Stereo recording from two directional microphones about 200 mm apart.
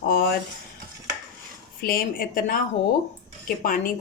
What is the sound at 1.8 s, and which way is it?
Speech, 45° left (ahead or behind).